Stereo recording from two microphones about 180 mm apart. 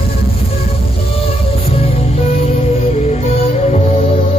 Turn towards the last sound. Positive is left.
turn(degrees=35)  # may be behind; listen again after turning